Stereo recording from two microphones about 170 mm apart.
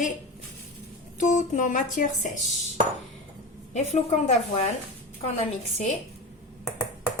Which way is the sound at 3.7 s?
40° left (ahead or behind).